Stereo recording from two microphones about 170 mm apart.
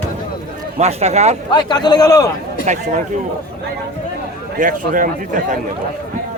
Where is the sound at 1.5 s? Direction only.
25° left (ahead or behind).